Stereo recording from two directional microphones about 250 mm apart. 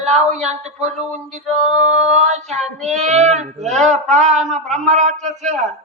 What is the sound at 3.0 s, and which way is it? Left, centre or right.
Speech, right.